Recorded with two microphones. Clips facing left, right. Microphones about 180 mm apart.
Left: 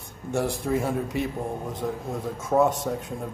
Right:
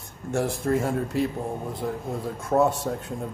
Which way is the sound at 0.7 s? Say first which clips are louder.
Right 1 dB; centre (ahead or behind).